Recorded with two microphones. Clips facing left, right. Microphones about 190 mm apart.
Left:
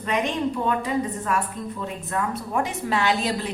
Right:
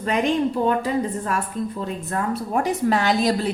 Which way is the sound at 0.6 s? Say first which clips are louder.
Right 4 dB; 35° right (ahead or behind).